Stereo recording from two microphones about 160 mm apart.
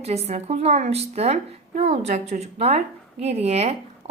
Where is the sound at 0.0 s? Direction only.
40° right (ahead or behind).